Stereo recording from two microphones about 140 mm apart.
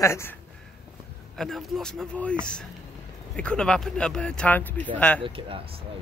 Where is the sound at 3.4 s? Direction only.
5° left (ahead or behind).